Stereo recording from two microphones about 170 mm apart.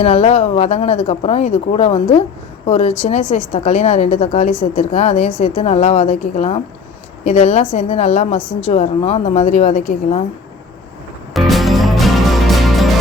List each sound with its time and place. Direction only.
0.0 s speech: 40° left (ahead or behind)
11.3 s music: centre (ahead or behind)